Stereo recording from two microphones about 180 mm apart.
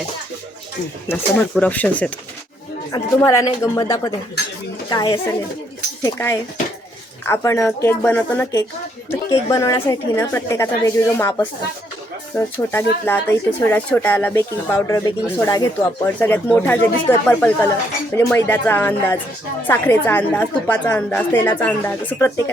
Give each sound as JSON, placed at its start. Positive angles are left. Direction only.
{"t": 1.0, "sound": "a woman's voice", "side_deg": 15}